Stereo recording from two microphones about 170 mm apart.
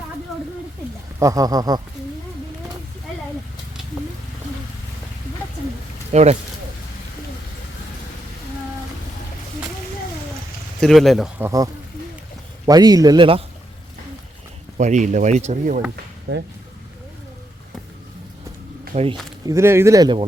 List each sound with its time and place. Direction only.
1.2 s speech: 20° right (ahead or behind)
6.1 s speech: 45° right (ahead or behind)
10.8 s speech: centre (ahead or behind)
11.3 s speech: 20° right (ahead or behind)
14.8 s speech: 45° right (ahead or behind)
18.9 s speech: 45° right (ahead or behind)
19.5 s speech: 15° right (ahead or behind)